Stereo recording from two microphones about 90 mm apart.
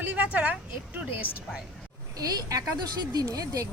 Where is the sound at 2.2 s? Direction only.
40° right (ahead or behind).